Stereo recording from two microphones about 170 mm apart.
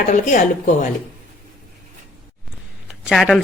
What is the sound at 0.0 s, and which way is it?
Speech, 50° left (ahead or behind).